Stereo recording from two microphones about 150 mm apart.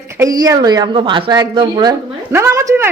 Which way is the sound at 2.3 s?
15° right (ahead or behind).